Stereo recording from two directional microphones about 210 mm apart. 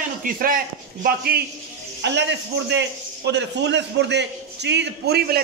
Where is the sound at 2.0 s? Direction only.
55° right (ahead or behind).